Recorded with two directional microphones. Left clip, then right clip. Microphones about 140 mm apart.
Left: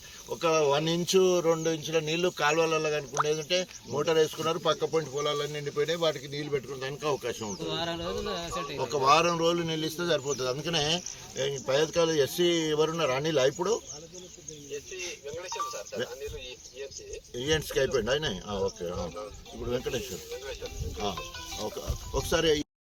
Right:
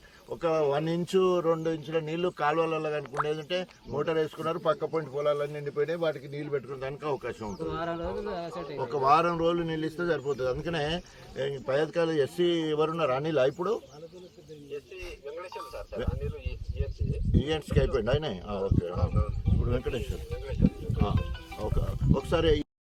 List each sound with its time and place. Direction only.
0.3 s speech: 5° left (ahead or behind)
7.6 s speech: 20° left (ahead or behind)
8.8 s speech: centre (ahead or behind)
15.0 s speech: 5° left (ahead or behind)
17.4 s speech: centre (ahead or behind)
21.6 s speech: centre (ahead or behind)